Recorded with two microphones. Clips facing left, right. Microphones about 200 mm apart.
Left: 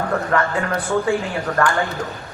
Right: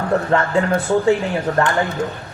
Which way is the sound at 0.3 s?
25° right (ahead or behind).